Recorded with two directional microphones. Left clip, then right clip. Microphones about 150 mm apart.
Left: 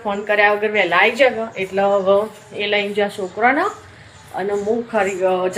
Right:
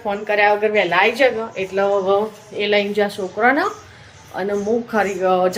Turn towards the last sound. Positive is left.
turn(degrees=-15)  # may be behind; listen again after turning